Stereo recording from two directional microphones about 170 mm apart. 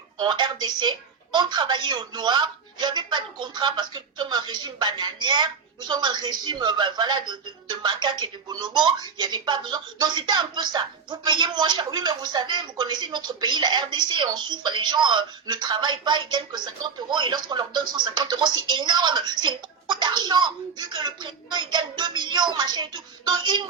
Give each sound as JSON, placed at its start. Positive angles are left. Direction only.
{"t": 0.2, "sound": "a woman's voice", "side_deg": -25}